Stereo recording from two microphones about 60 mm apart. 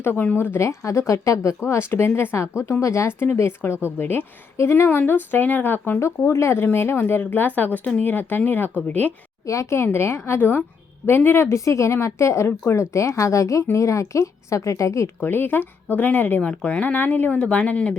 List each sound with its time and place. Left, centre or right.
0.0 s speech: left
1.9 s a woman's voice: left
4.0 s speech: left
6.0 s a woman's voice: left
9.5 s a woman's voice: left
11.5 s speech: left
11.9 s speech: left
15.2 s speech: left